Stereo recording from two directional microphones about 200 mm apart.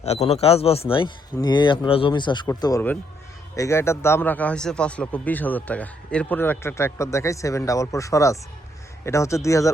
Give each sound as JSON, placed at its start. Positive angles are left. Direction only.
{"t": 0.0, "sound": "a man's voice", "side_deg": 30}